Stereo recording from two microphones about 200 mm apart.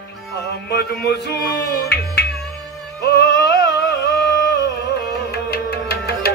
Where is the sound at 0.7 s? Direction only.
55° left (ahead or behind).